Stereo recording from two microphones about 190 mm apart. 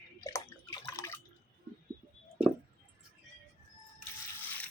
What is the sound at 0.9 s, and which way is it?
Drip, 15° left (ahead or behind).